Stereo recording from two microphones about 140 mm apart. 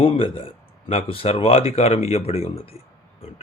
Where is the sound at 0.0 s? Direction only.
40° left (ahead or behind).